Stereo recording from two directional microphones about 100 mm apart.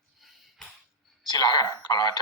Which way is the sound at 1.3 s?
40° left (ahead or behind).